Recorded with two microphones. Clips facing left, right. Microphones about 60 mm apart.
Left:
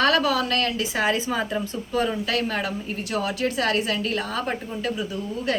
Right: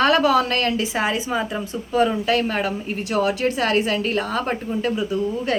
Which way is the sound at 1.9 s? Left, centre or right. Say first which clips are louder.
Right 6 dB; right.